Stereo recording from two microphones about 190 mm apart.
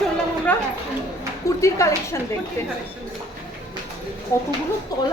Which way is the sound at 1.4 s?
15° left (ahead or behind).